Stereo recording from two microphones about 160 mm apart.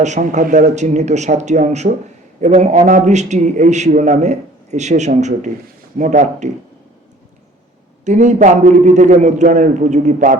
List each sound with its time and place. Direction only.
0.0 s a man's voice: 50° right (ahead or behind)
8.0 s a man's voice: 50° right (ahead or behind)